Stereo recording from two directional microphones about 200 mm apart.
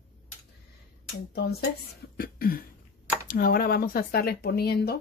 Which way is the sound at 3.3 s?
45° left (ahead or behind).